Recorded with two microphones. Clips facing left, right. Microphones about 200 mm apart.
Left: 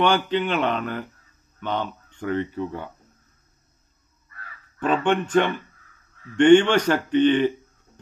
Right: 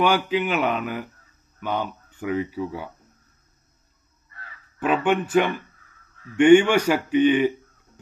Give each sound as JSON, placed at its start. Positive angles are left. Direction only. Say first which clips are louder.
{"t": 0.0, "sound": "speech", "louder": "even", "side_deg": -5}
{"t": 4.8, "sound": "speech", "louder": "even", "side_deg": -10}